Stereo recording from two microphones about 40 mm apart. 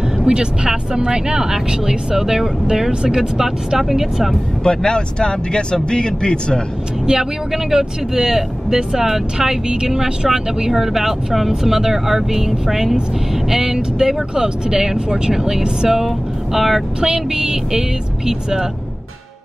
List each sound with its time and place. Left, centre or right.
0.2 s speech: right
3.2 s speech: centre
4.6 s speech: centre
7.1 s speech: centre
17.1 s speech: centre